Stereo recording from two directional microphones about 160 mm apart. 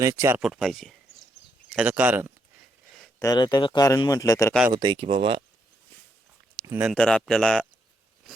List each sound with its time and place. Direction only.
0.0 s speech: 15° right (ahead or behind)
0.4 s speech: centre (ahead or behind)
1.7 s speech: 10° right (ahead or behind)
3.2 s speech: 25° left (ahead or behind)
4.7 s speech: 30° right (ahead or behind)
6.6 s speech: 15° right (ahead or behind)
6.9 s speech: 5° left (ahead or behind)